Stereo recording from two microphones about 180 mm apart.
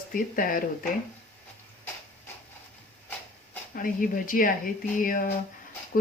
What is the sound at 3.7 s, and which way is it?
Speech, 50° left (ahead or behind).